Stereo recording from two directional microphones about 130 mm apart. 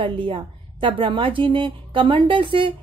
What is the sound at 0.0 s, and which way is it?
A woman's voice, 40° right (ahead or behind).